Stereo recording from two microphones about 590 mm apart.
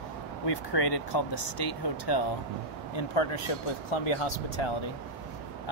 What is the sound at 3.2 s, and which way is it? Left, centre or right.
Speech, left.